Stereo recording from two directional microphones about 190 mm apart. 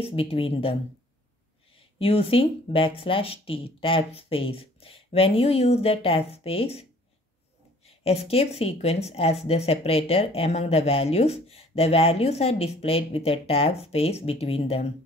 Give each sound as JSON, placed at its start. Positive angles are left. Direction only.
{"t": 0.0, "sound": "speech", "side_deg": 30}
{"t": 2.0, "sound": "speech", "side_deg": 30}